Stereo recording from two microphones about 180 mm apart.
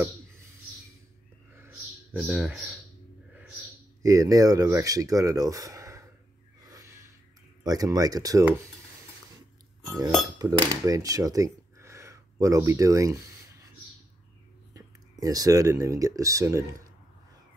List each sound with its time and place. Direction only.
2.1 s speech: 5° right (ahead or behind)
4.0 s speech: 15° right (ahead or behind)
6.6 s a sound: 20° right (ahead or behind)
7.6 s speech: 20° right (ahead or behind)
10.4 s speech: 20° right (ahead or behind)
14.7 s speech: 20° right (ahead or behind)